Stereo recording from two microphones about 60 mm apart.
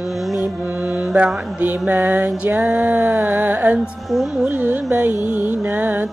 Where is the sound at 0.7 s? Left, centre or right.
Right.